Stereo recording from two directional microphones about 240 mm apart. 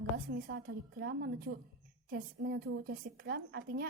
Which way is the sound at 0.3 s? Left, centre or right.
Right.